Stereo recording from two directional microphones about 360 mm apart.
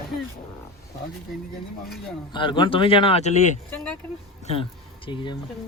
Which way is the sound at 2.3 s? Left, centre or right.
Centre.